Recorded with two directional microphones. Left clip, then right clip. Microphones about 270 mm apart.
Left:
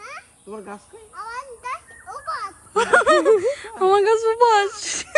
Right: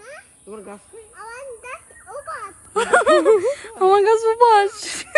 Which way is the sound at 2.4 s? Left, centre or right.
Centre.